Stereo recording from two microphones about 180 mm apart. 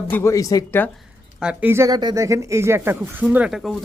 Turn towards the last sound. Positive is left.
turn(degrees=0)  # may be behind; listen again after turning